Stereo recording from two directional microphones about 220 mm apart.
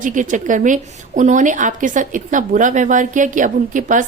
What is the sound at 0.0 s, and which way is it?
A woman's voice, 35° right (ahead or behind).